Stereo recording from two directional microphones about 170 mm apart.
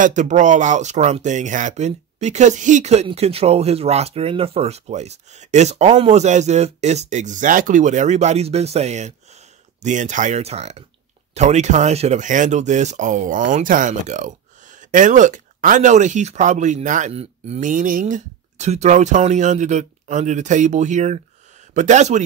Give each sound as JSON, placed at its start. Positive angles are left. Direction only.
{"t": 0.0, "sound": "speech", "side_deg": -45}